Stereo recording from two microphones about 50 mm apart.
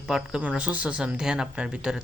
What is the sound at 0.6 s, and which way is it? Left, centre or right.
Speech, right.